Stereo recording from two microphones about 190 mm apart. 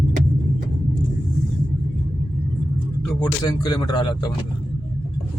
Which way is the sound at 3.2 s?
20° left (ahead or behind).